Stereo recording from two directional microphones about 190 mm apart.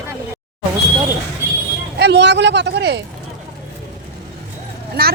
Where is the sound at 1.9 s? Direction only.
65° right (ahead or behind).